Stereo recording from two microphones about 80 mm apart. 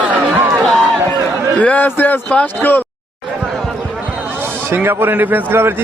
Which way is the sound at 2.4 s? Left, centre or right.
Left.